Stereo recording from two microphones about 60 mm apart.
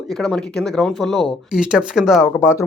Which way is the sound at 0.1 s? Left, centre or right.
Centre.